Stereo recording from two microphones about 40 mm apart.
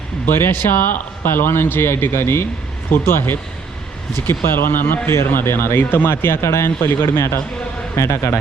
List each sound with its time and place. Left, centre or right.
0.3 s speech: left
2.9 s speech: left
5.0 s speech: left